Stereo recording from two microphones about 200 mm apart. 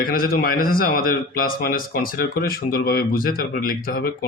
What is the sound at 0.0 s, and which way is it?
Speech, 45° left (ahead or behind).